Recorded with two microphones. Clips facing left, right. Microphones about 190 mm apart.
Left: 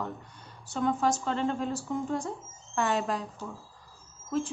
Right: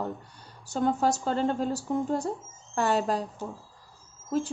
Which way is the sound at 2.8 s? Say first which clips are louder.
Right 3 dB; 35° right (ahead or behind).